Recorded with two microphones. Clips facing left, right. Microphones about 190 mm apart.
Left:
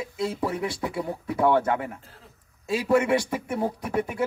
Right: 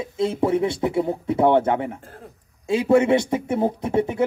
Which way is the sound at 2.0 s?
50° right (ahead or behind).